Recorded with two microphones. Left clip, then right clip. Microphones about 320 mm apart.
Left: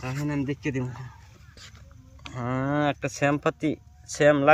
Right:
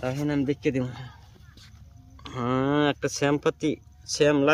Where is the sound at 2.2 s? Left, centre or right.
Centre.